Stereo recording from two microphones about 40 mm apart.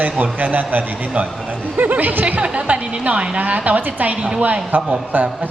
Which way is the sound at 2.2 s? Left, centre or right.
Right.